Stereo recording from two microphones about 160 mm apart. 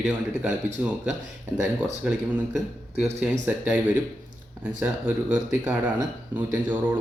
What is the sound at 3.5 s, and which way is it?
Speech, 10° right (ahead or behind).